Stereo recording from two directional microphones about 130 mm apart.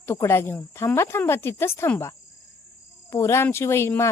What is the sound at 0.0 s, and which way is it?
Speech, 20° left (ahead or behind).